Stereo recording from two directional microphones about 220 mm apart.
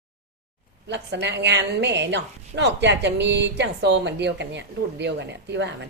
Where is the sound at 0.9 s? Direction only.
50° right (ahead or behind).